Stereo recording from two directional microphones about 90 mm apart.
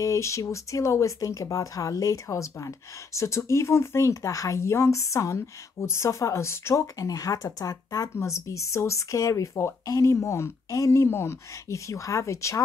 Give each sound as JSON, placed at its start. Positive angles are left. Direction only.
{"t": 0.0, "sound": "speech", "side_deg": 35}